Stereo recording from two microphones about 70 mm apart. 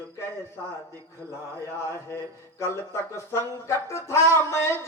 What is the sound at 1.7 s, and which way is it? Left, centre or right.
Speech, left.